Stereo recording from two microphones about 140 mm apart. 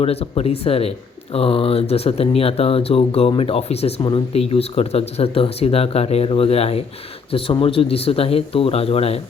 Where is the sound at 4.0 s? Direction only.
35° left (ahead or behind).